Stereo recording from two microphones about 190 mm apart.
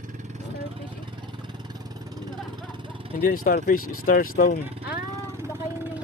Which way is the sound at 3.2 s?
50° left (ahead or behind).